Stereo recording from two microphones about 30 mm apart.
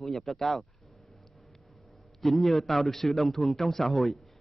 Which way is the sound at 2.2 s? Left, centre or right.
Centre.